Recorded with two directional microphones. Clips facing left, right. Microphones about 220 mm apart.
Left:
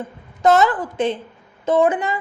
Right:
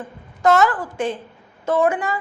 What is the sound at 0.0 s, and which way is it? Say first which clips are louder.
A woman's voice: left 1 dB; 20° left (ahead or behind).